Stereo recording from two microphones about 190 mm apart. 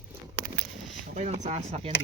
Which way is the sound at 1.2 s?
35° right (ahead or behind).